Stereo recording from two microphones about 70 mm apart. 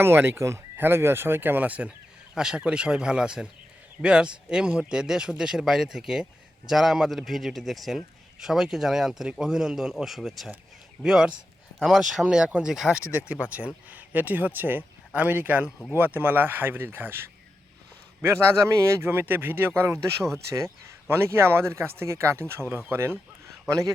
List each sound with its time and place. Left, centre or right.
0.0 s speech: right
2.3 s a man's voice: centre; by 23.1 s right
23.6 s speech: right